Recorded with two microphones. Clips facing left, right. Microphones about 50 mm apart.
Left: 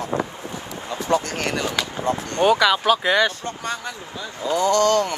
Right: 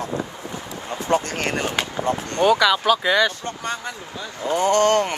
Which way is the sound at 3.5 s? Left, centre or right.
Right.